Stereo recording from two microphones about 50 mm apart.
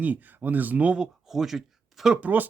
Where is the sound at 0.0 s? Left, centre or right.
Right.